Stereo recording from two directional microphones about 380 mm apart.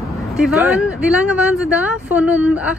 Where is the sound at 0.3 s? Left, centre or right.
Centre.